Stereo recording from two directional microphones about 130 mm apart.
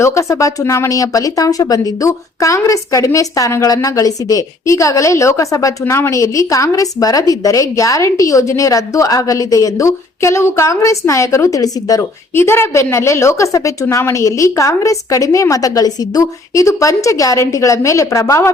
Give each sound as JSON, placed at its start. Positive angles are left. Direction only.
{"t": 0.0, "sound": "a woman's voice", "side_deg": 25}